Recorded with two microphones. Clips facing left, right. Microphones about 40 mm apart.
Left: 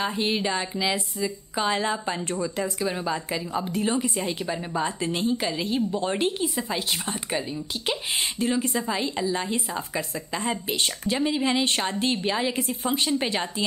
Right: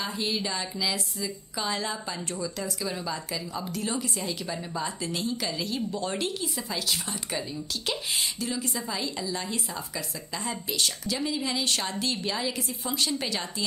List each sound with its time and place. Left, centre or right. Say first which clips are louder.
0.0 s a woman's voice: left 5 dB; left